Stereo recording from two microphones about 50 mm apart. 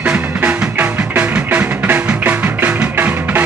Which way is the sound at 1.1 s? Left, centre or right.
Right.